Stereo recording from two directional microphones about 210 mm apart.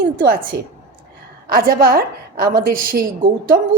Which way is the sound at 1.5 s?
45° right (ahead or behind).